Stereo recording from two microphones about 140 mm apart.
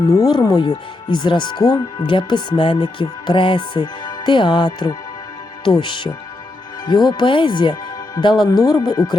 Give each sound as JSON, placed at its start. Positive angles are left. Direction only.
{"t": 0.1, "sound": "speech", "side_deg": 30}